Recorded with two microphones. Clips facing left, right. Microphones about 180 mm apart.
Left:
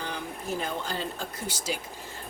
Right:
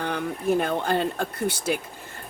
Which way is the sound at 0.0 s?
60° right (ahead or behind).